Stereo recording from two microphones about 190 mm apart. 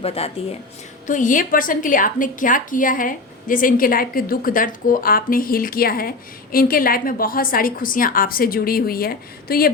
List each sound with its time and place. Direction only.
0.0 s speech: 30° left (ahead or behind)
1.0 s a woman's voice: 45° left (ahead or behind)